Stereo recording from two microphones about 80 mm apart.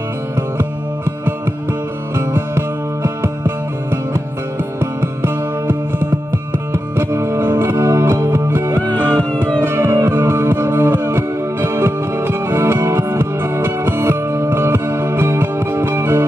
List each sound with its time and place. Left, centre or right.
2.1 s music: right
9.0 s music: centre
9.6 s music: right